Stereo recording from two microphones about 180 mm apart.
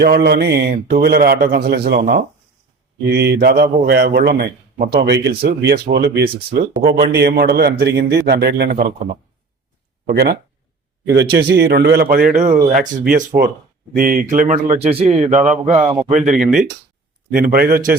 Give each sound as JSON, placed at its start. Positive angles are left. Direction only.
{"t": 0.0, "sound": "a man's voice", "side_deg": -60}
{"t": 3.1, "sound": "a man's voice", "side_deg": -65}
{"t": 10.1, "sound": "a man's voice", "side_deg": -60}
{"t": 13.1, "sound": "a man's voice", "side_deg": -60}
{"t": 16.4, "sound": "speech", "side_deg": 0}
{"t": 17.3, "sound": "a man's voice", "side_deg": -55}